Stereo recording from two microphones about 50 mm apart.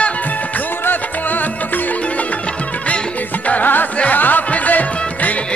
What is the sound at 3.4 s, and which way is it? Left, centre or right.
Music, left.